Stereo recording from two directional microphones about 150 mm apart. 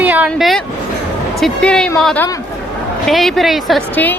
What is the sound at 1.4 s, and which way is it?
A woman's voice, 5° left (ahead or behind).